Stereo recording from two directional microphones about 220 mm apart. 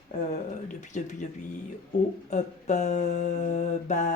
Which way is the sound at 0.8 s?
35° left (ahead or behind).